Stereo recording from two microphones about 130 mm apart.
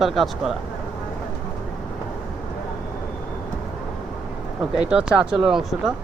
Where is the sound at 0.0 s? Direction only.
Centre (ahead or behind).